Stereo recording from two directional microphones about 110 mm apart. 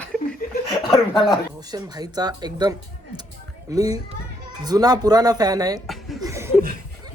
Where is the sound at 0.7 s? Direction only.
50° left (ahead or behind).